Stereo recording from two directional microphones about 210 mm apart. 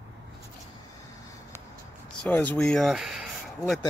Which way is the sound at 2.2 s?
10° left (ahead or behind).